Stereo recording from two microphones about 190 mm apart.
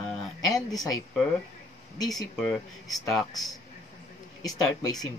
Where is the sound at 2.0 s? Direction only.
20° left (ahead or behind).